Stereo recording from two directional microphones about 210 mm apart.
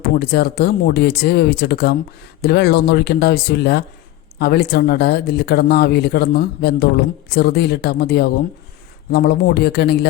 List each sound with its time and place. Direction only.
0.0 s speech: 50° left (ahead or behind)